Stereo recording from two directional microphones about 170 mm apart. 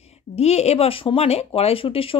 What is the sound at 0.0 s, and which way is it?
A woman's voice, 40° left (ahead or behind).